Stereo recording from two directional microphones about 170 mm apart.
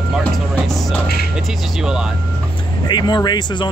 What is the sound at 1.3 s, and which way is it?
Speech, centre (ahead or behind).